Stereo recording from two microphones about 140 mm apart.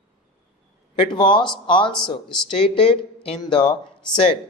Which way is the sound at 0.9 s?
35° left (ahead or behind).